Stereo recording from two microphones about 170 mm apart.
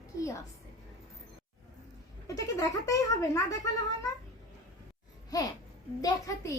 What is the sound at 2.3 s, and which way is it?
A child's voice, 20° left (ahead or behind).